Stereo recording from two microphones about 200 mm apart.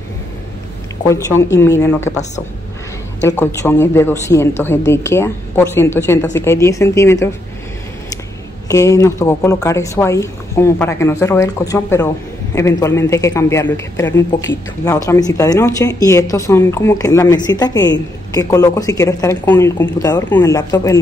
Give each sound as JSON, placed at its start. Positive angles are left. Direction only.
{"t": 1.0, "sound": "speech", "side_deg": 15}
{"t": 3.2, "sound": "speech", "side_deg": 15}
{"t": 8.6, "sound": "speech", "side_deg": 15}